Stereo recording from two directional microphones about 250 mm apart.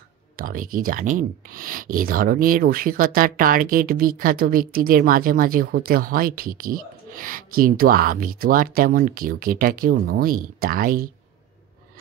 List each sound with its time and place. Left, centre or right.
0.4 s speech: right